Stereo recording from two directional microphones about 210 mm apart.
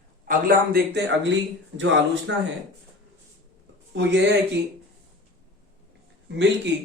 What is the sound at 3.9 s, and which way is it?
Speech, 60° right (ahead or behind).